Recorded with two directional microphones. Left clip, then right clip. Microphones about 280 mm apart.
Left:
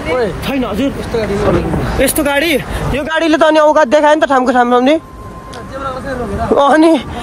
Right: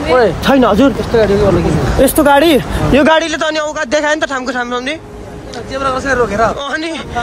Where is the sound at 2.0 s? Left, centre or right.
Centre.